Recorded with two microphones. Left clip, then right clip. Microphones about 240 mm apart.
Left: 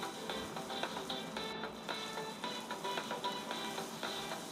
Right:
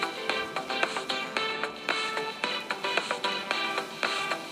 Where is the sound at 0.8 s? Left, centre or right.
Right.